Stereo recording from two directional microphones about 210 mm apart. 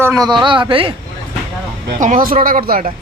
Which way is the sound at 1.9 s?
35° right (ahead or behind).